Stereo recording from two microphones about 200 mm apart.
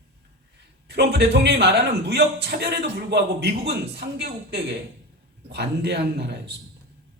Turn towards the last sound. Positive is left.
turn(degrees=-55)  # may be behind; listen again after turning